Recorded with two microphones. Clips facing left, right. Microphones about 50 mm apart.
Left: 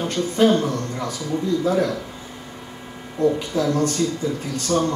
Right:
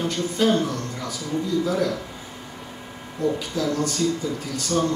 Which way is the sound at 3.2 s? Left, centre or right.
Left.